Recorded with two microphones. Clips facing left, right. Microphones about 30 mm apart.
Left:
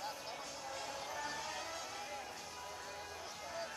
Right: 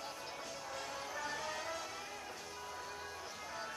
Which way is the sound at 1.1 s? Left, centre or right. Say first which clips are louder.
Right 3 dB; centre.